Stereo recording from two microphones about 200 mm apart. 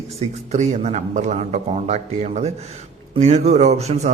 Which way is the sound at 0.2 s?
35° right (ahead or behind).